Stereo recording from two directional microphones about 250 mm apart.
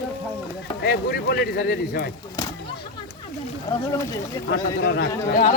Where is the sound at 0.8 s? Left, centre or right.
Left.